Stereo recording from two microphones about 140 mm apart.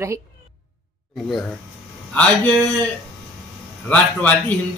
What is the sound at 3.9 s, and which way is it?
Speech, 10° left (ahead or behind).